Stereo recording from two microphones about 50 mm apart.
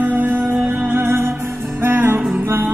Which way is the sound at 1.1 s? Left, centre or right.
Right.